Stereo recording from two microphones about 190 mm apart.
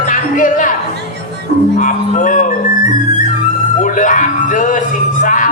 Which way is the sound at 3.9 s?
45° left (ahead or behind).